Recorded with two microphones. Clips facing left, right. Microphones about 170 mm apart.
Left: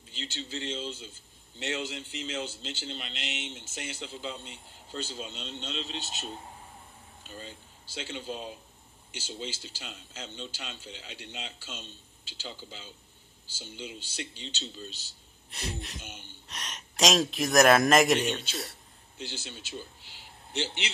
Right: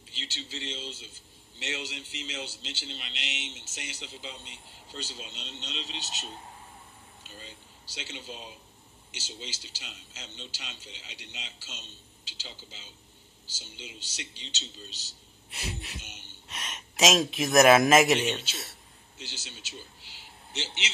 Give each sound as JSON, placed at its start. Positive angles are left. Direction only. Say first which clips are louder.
{"t": 0.1, "sound": "a man's voice", "louder": "left 4 dB", "side_deg": 50}
{"t": 15.5, "sound": "a man's voice", "louder": "left 1 dB", "side_deg": -5}
{"t": 16.0, "sound": "a man's voice", "louder": "left 4 dB", "side_deg": 50}
{"t": 16.4, "sound": "a man's voice", "louder": "right 2 dB", "side_deg": 0}
{"t": 19.1, "sound": "a man's voice", "louder": "left 5 dB", "side_deg": 55}